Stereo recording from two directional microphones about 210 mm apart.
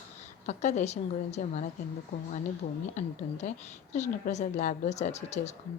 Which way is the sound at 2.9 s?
35° left (ahead or behind).